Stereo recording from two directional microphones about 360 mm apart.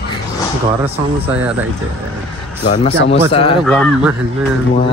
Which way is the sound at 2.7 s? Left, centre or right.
Centre.